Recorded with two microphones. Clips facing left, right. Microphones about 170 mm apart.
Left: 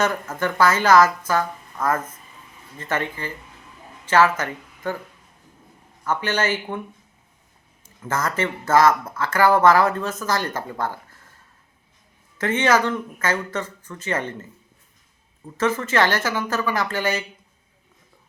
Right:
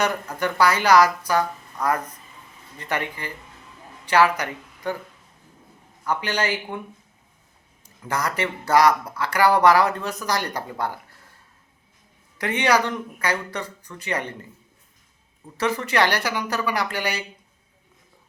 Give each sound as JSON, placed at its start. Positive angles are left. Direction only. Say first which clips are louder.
{"t": 0.0, "sound": "speech", "louder": "left 1 dB", "side_deg": -15}
{"t": 6.1, "sound": "speech", "louder": "left 2 dB", "side_deg": -15}
{"t": 8.0, "sound": "speech", "louder": "left 1 dB", "side_deg": -15}
{"t": 12.4, "sound": "speech", "louder": "left 2 dB", "side_deg": -15}
{"t": 15.5, "sound": "speech", "louder": "left 2 dB", "side_deg": -15}